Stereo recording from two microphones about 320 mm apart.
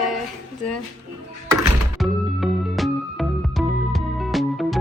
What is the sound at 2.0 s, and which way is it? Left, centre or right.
Music, centre.